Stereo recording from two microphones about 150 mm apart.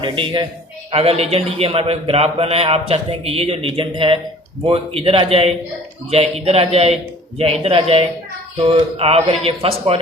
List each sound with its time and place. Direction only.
0.0 s a man's voice: 35° right (ahead or behind)